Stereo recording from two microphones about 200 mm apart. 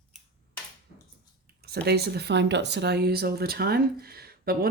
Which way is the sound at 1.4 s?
50° right (ahead or behind).